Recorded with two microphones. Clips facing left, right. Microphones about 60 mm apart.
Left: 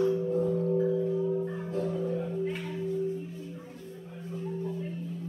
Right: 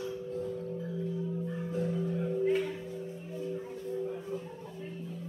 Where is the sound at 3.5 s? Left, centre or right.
Centre.